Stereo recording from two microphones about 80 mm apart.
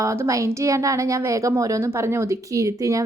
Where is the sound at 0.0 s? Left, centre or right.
Right.